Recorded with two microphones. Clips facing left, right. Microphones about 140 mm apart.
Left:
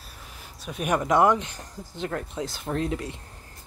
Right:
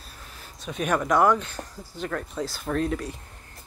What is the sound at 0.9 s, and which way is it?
Speech, 20° left (ahead or behind).